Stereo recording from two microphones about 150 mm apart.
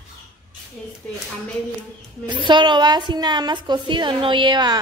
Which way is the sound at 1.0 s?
10° left (ahead or behind).